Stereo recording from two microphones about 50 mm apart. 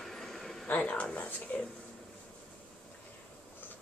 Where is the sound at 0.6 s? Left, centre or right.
Left.